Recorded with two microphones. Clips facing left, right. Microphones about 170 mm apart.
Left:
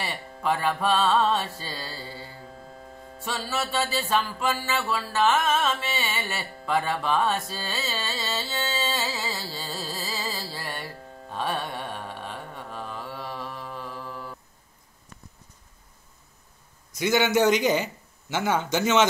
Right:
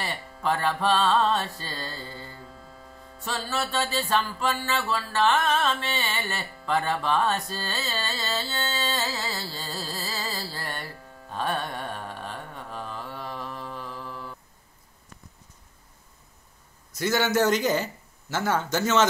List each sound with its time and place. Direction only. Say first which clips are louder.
0.0 s mantra: even; 5° left (ahead or behind)
3.3 s carnatic music: even; centre (ahead or behind)
9.3 s mantra: left 1 dB; 10° left (ahead or behind)
9.8 s carnatic music: left 1 dB; 5° left (ahead or behind)
11.3 s mantra: even; 5° left (ahead or behind)
17.5 s mantra: left 2 dB; 15° left (ahead or behind)
18.6 s speech: left 1 dB; 20° left (ahead or behind)